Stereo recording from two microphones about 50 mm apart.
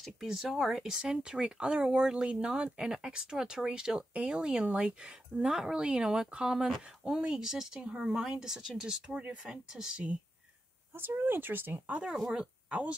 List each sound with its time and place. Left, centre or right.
0.2 s speech: centre
11.0 s speech: right
12.1 s speech: centre